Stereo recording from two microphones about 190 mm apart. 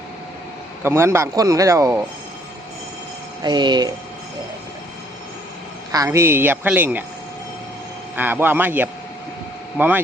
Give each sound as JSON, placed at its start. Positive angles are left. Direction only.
{"t": 0.8, "sound": "speech", "side_deg": -10}
{"t": 3.4, "sound": "speech", "side_deg": -25}
{"t": 5.9, "sound": "speech", "side_deg": -15}
{"t": 8.1, "sound": "speech", "side_deg": -10}